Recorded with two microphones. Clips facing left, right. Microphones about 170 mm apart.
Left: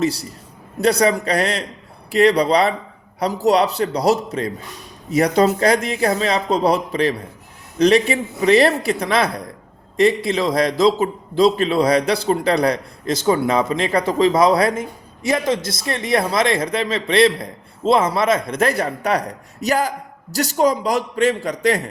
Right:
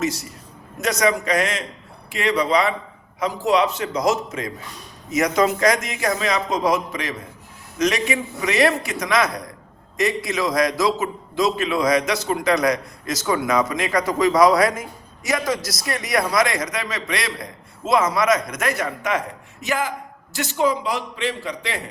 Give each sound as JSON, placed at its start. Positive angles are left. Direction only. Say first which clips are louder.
{"t": 0.0, "sound": "a man's voice", "louder": "left 4 dB", "side_deg": 35}